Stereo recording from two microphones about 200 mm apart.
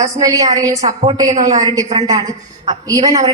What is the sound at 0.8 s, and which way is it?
A woman's voice, 30° right (ahead or behind).